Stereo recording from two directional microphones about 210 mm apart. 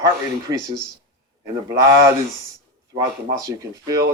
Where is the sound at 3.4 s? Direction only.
15° right (ahead or behind).